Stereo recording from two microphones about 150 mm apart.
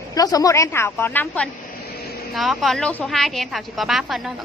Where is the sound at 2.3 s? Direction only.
Centre (ahead or behind).